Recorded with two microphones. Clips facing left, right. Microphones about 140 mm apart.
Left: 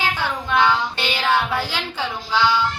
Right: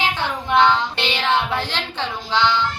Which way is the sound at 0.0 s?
20° right (ahead or behind).